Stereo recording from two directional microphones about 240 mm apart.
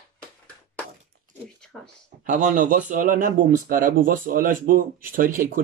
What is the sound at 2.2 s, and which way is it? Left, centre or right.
Speech, right.